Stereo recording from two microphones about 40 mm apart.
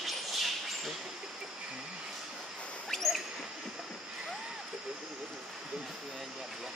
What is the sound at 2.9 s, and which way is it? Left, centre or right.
Rodents, centre.